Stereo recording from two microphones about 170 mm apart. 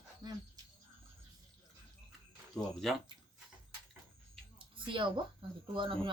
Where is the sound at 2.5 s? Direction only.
Centre (ahead or behind).